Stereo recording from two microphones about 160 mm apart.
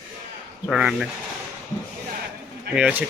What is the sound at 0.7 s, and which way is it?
Speech, 5° right (ahead or behind).